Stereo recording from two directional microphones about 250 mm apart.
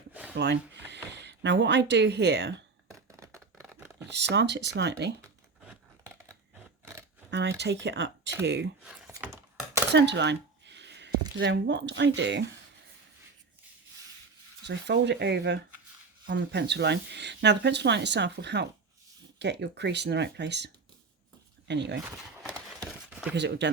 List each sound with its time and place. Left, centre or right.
0.1 s a sound: centre
0.3 s speech: right
3.1 s a sound: centre
4.1 s speech: right
5.6 s scissors: centre
7.3 s speech: right
8.8 s a sound: centre
9.9 s speech: right
14.7 s speech: right
21.7 s speech: right
23.0 s a sound: centre
23.3 s speech: right